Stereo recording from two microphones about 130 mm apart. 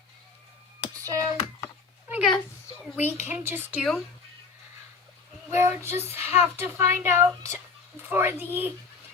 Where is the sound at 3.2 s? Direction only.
15° right (ahead or behind).